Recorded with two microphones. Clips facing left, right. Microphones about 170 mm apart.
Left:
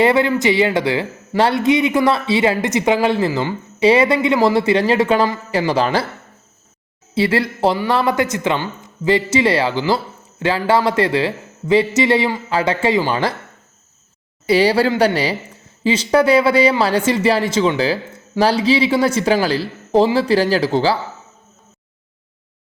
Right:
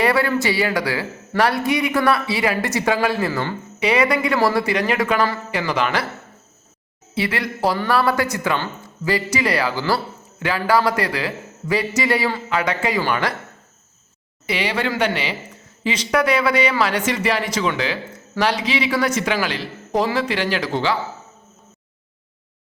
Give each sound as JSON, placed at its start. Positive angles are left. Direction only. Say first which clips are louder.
{"t": 0.0, "sound": "speech", "louder": "left 4 dB", "side_deg": 20}
{"t": 7.1, "sound": "speech", "louder": "left 6 dB", "side_deg": 30}
{"t": 14.4, "sound": "speech", "louder": "left 9 dB", "side_deg": 35}